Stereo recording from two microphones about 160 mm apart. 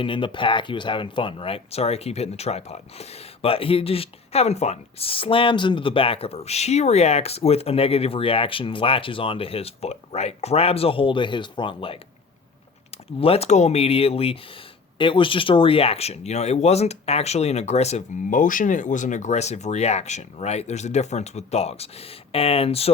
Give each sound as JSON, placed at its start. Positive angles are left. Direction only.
{"t": 0.0, "sound": "speech", "side_deg": 30}
{"t": 13.1, "sound": "speech", "side_deg": 35}